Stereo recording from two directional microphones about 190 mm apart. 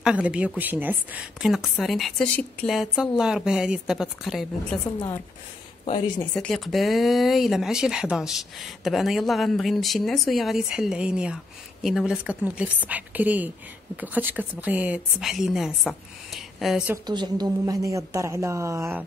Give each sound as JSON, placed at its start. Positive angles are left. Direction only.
{"t": 0.0, "sound": "speech", "side_deg": -5}
{"t": 5.9, "sound": "speech", "side_deg": 25}
{"t": 6.3, "sound": "a woman's voice", "side_deg": 5}
{"t": 16.9, "sound": "a woman's voice", "side_deg": -20}